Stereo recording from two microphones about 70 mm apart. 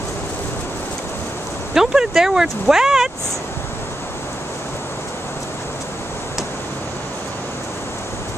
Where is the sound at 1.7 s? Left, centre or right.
Centre.